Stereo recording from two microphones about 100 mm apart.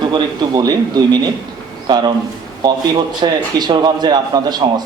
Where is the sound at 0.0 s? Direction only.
50° right (ahead or behind).